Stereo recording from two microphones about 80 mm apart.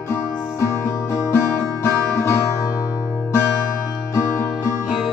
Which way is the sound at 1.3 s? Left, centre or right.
Left.